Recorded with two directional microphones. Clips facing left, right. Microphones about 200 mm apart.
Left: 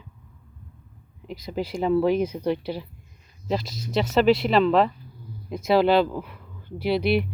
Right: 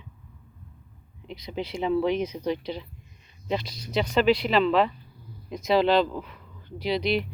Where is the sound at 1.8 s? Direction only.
5° left (ahead or behind).